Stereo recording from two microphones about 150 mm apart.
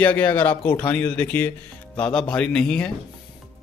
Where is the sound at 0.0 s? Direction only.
10° left (ahead or behind).